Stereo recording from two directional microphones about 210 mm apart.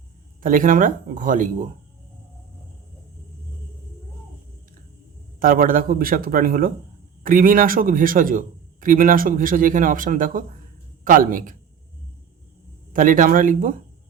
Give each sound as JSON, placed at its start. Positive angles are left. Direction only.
{"t": 0.4, "sound": "a man's voice", "side_deg": -40}
{"t": 5.4, "sound": "a man's voice", "side_deg": -40}
{"t": 12.9, "sound": "a man's voice", "side_deg": -40}